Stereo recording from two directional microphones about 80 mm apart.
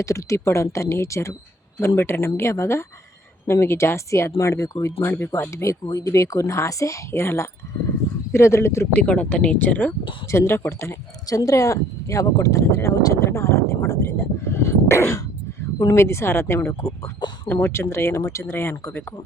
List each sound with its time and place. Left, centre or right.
0.0 s speech: left
8.9 s speech: centre
10.3 s speech: left
11.3 s speech: left